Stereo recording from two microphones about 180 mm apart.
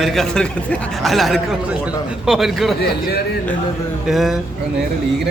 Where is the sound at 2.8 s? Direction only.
60° left (ahead or behind).